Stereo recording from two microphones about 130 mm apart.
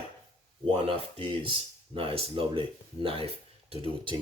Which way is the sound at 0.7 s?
45° right (ahead or behind).